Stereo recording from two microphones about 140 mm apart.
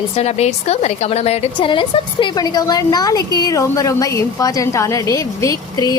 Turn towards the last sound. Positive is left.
turn(degrees=25)  # may be behind; listen again after turning